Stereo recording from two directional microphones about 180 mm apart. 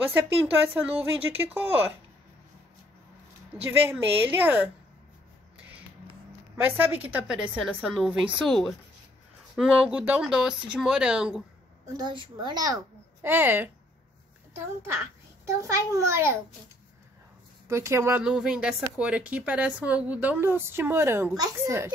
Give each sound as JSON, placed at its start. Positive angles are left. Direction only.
{"t": 0.1, "sound": "speech", "side_deg": -10}
{"t": 4.0, "sound": "speech", "side_deg": -10}
{"t": 6.5, "sound": "a woman's voice", "side_deg": -10}
{"t": 12.0, "sound": "a child's voice", "side_deg": -25}
{"t": 15.4, "sound": "speech", "side_deg": -15}
{"t": 17.6, "sound": "speech", "side_deg": -15}